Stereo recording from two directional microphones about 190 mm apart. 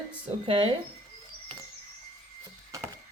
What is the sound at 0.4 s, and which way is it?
Speech, 30° right (ahead or behind).